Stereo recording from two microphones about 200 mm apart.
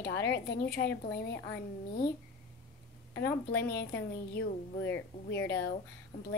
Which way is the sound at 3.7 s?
60° left (ahead or behind).